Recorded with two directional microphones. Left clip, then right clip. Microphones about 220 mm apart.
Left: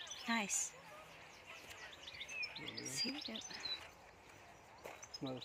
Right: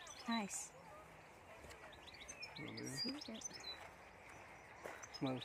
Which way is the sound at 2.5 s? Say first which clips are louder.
Left 3 dB; 35° right (ahead or behind).